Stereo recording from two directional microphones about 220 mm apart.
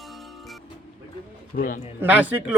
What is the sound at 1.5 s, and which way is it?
Speech, 40° left (ahead or behind).